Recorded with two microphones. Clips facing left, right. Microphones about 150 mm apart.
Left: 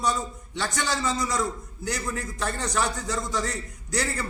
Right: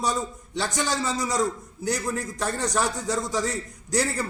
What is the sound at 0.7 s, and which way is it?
A man's voice, 35° right (ahead or behind).